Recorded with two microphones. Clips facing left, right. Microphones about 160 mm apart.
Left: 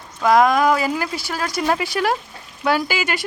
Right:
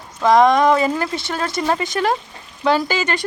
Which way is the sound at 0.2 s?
5° left (ahead or behind).